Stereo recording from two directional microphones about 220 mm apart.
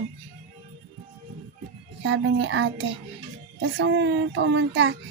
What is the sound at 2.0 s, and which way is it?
A child's voice, 60° right (ahead or behind).